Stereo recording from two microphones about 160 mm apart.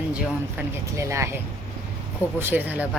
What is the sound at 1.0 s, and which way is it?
Speech, 15° right (ahead or behind).